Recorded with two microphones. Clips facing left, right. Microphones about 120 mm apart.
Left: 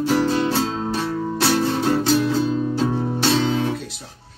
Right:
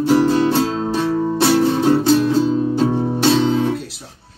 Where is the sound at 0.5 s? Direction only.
20° right (ahead or behind).